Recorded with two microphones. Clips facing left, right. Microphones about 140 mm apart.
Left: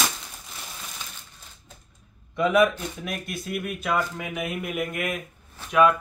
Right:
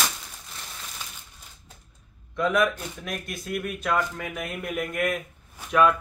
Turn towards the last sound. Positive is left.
turn(degrees=5)  # may be behind; listen again after turning